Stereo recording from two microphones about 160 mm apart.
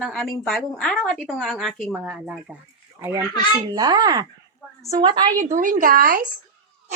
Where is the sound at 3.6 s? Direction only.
25° right (ahead or behind).